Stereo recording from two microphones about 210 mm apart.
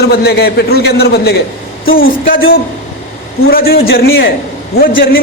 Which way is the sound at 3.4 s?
45° left (ahead or behind).